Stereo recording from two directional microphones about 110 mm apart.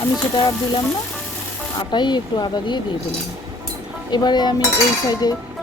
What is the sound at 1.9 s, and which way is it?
Speech, 45° left (ahead or behind).